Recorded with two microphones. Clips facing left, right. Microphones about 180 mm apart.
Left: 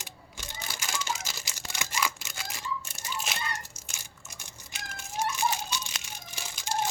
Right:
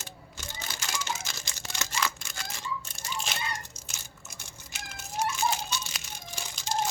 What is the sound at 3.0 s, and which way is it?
Tearing, 5° left (ahead or behind).